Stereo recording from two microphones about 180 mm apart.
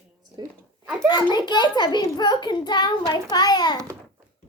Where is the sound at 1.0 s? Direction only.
25° left (ahead or behind).